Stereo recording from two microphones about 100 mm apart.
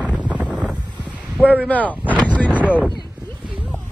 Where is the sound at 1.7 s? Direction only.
15° left (ahead or behind).